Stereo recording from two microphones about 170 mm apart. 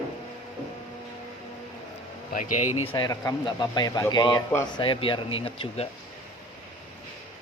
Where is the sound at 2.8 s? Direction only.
30° left (ahead or behind).